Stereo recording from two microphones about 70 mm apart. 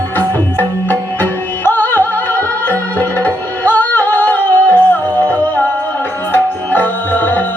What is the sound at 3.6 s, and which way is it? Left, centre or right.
Music, left.